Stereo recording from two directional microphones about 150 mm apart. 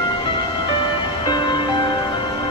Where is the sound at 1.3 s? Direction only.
30° left (ahead or behind).